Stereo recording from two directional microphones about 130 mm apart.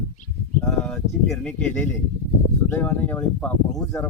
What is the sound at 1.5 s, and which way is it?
Speech, 10° left (ahead or behind).